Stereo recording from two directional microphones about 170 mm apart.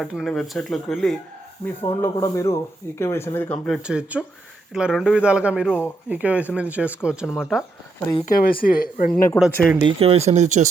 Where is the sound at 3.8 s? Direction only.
5° right (ahead or behind).